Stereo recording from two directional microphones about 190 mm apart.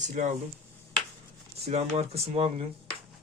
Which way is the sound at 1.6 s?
35° right (ahead or behind).